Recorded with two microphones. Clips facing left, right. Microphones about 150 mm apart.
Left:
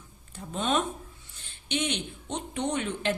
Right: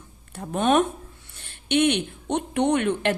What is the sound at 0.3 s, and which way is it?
A woman's voice, 60° right (ahead or behind).